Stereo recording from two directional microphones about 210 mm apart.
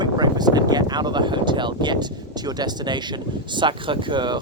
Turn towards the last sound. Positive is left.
turn(degrees=-20)  # may be behind; listen again after turning